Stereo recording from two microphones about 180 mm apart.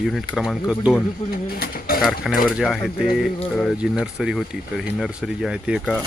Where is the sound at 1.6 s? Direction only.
55° left (ahead or behind).